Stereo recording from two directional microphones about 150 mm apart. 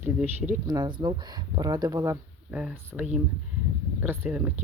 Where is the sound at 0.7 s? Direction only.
30° right (ahead or behind).